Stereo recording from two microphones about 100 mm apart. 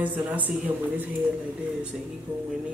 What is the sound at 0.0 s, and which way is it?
Speech, 15° right (ahead or behind).